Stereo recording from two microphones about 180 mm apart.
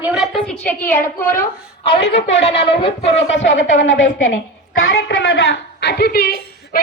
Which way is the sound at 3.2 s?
90° left.